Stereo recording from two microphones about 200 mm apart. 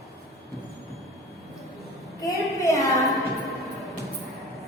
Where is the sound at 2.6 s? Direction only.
15° left (ahead or behind).